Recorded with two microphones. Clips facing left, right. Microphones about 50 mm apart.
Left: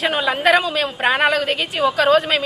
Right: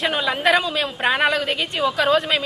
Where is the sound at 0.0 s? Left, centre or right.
Centre.